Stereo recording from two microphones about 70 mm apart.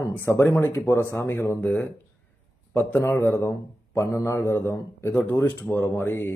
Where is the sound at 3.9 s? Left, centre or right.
Left.